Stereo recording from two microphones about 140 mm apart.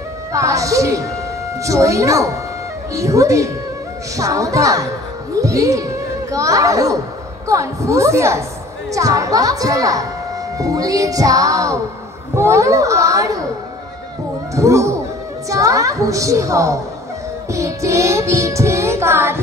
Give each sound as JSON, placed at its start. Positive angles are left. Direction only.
{"t": 0.3, "sound": "child singing", "side_deg": -25}
{"t": 14.5, "sound": "child singing", "side_deg": -20}